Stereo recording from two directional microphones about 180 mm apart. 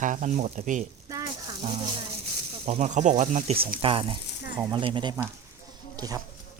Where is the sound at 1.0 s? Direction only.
20° right (ahead or behind).